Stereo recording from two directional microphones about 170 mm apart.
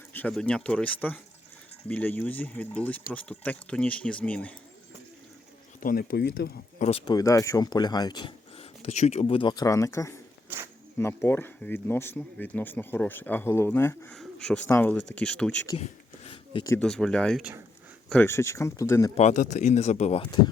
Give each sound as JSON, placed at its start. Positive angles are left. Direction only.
{"t": 0.1, "sound": "speech", "side_deg": 10}
{"t": 5.8, "sound": "speech", "side_deg": 60}
{"t": 6.7, "sound": "speech", "side_deg": 40}
{"t": 7.0, "sound": "speech", "side_deg": 20}
{"t": 15.8, "sound": "a sound", "side_deg": 35}
{"t": 16.8, "sound": "speech", "side_deg": 5}
{"t": 19.1, "sound": "speech", "side_deg": 45}